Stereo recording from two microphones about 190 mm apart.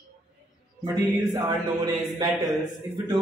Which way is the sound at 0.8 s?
20° right (ahead or behind).